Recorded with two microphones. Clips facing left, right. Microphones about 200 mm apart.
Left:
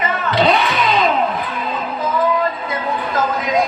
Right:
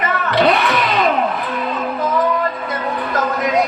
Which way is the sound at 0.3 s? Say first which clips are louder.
Right 1 dB; 60° right (ahead or behind).